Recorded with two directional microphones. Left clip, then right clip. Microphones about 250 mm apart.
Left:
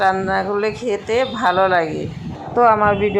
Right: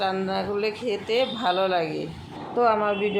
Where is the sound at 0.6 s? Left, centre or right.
Left.